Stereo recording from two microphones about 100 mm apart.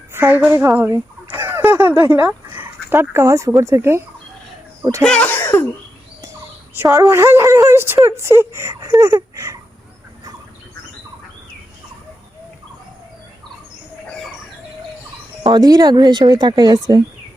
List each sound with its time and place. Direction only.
0.1 s a woman's voice: 15° right (ahead or behind)
0.9 s fowl: 25° right (ahead or behind)
3.6 s speech: 30° right (ahead or behind)
5.0 s speech: 10° left (ahead or behind)
5.3 s cough: 20° left (ahead or behind)
6.8 s speech: 40° right (ahead or behind)
7.1 s speech: 25° right (ahead or behind)
15.4 s speech: 45° right (ahead or behind)